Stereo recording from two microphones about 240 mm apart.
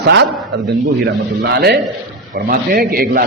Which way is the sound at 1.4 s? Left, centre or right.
Right.